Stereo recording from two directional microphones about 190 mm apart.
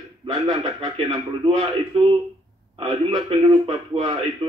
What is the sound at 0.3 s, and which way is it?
A man's voice, 20° right (ahead or behind).